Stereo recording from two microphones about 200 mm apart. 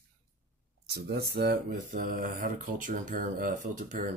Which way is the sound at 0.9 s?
50° right (ahead or behind).